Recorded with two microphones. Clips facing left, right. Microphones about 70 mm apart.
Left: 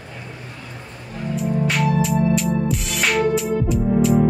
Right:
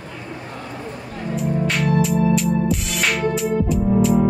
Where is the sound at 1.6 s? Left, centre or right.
Centre.